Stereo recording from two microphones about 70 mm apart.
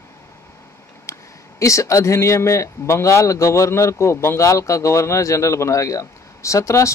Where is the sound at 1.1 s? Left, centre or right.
Left.